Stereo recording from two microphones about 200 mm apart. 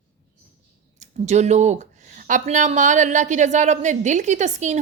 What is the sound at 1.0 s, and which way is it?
Speech, 35° right (ahead or behind).